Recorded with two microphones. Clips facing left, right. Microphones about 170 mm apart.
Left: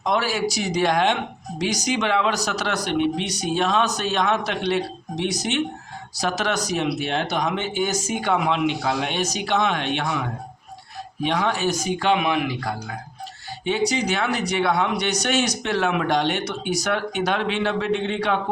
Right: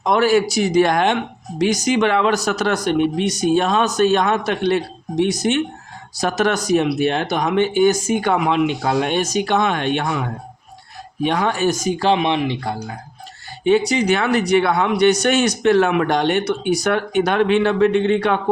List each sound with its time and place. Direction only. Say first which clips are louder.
0.0 s speech: right 7 dB; 55° right (ahead or behind)
11.2 s speech: right 4 dB; 50° right (ahead or behind); by 12.7 s 25° right (ahead or behind)
13.7 s speech: right 7 dB; 55° right (ahead or behind)